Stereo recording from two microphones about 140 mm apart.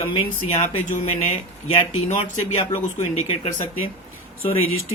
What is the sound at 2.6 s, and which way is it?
Speech, 40° left (ahead or behind).